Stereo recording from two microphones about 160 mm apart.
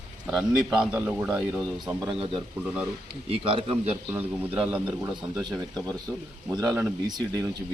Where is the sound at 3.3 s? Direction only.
35° right (ahead or behind).